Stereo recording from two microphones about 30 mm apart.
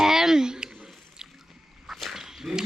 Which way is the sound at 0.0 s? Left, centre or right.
Centre.